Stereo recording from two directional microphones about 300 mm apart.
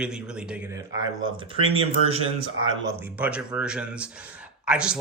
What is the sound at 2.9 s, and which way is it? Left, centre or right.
A man's voice, centre.